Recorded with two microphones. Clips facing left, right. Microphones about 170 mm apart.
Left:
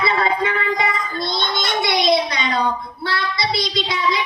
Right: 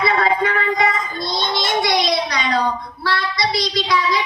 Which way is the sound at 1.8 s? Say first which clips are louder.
Left 4 dB; 25° left (ahead or behind).